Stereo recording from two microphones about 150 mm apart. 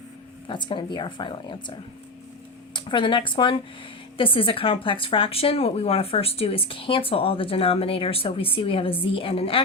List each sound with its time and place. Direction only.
0.4 s speech: 30° left (ahead or behind)
2.7 s speech: 35° left (ahead or behind)